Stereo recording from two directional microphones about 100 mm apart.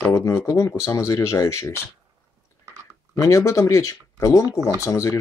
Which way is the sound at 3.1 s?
30° left (ahead or behind).